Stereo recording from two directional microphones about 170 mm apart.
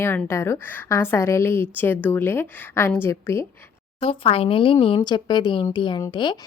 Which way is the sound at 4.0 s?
35° left (ahead or behind).